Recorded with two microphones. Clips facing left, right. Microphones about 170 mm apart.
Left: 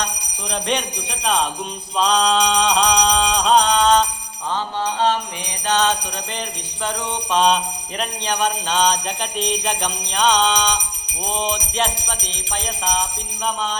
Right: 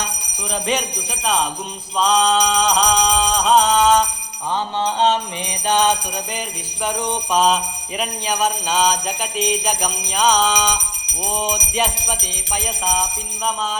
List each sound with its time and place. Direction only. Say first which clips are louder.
0.7 s jingle bell: right 1 dB; 5° right (ahead or behind)
2.0 s music: right 1 dB; centre (ahead or behind)
4.5 s music: right 2 dB; 20° right (ahead or behind)
7.3 s jingle bell: left 1 dB; 5° right (ahead or behind)